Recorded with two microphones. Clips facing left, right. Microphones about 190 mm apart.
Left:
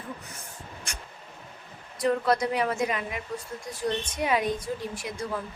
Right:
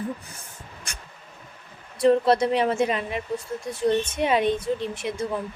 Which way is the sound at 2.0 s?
30° right (ahead or behind).